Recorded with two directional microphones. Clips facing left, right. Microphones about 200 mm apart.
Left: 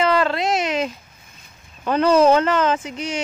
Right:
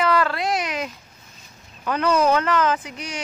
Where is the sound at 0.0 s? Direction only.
25° left (ahead or behind).